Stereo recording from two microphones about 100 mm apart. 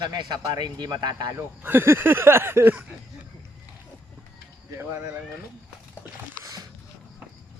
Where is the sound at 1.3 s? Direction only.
20° right (ahead or behind).